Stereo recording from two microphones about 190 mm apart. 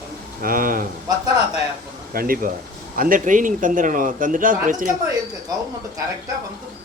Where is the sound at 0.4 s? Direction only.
45° right (ahead or behind).